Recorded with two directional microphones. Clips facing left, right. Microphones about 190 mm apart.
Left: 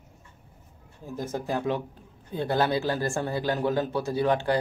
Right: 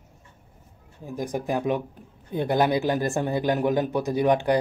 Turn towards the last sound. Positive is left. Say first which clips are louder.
# right 3 dB
turn(degrees=-15)  # may be behind; listen again after turning